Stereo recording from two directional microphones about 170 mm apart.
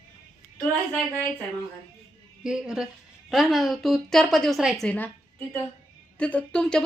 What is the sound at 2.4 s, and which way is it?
Speech, 5° right (ahead or behind).